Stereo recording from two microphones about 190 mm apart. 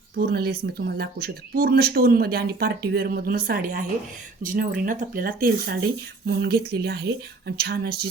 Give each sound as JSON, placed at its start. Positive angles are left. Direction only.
{"t": 0.2, "sound": "speech", "side_deg": -55}